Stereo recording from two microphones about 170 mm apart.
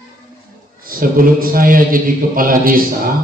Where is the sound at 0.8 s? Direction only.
55° right (ahead or behind).